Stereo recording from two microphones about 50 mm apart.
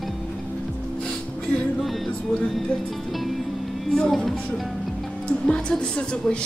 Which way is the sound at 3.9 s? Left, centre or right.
Centre.